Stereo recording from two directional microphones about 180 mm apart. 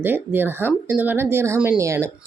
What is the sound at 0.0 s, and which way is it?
Speech, 10° right (ahead or behind).